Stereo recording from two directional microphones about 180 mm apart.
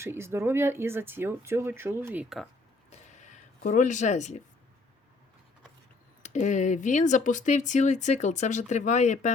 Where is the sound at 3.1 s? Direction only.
40° left (ahead or behind).